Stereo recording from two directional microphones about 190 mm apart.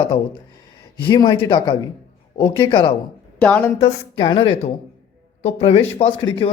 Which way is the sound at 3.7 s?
30° left (ahead or behind).